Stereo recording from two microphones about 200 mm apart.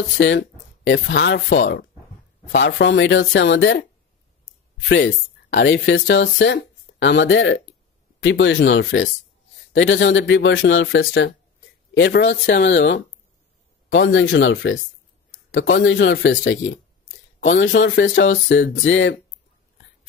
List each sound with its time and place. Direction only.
0.2 s speech: 65° left (ahead or behind)
2.6 s speech: 65° left (ahead or behind)
4.8 s speech: 60° left (ahead or behind)
15.8 s speech: 65° left (ahead or behind)